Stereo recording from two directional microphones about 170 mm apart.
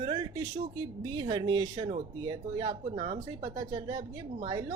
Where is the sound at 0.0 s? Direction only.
25° right (ahead or behind).